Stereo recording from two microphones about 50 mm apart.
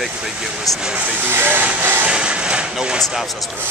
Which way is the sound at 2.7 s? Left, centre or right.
Centre.